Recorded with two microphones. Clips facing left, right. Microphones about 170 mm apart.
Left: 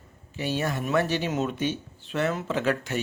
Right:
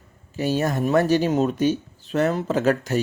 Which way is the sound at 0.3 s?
40° right (ahead or behind).